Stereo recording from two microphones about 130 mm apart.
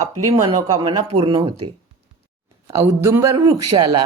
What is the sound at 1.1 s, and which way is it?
Speech, 40° right (ahead or behind).